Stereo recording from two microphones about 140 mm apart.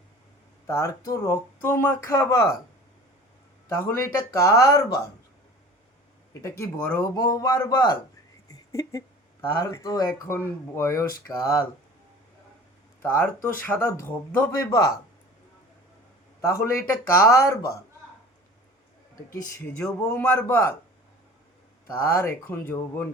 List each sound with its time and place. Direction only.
0.7 s speech: 20° left (ahead or behind)
3.7 s speech: 15° left (ahead or behind)
6.4 s speech: 15° left (ahead or behind)
7.2 s speech: 25° left (ahead or behind)
13.0 s speech: 15° left (ahead or behind)
14.5 s speech: 25° left (ahead or behind)
16.4 s speech: 20° left (ahead or behind)
19.3 s speech: 20° left (ahead or behind)
22.1 s speech: 15° left (ahead or behind)